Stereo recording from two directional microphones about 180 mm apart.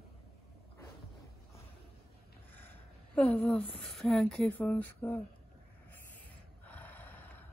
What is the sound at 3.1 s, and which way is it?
Speech, 10° left (ahead or behind).